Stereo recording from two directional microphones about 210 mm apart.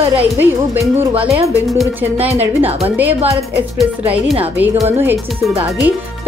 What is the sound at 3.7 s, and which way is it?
Speech, 5° right (ahead or behind).